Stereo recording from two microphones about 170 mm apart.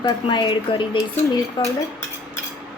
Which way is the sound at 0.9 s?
15° left (ahead or behind).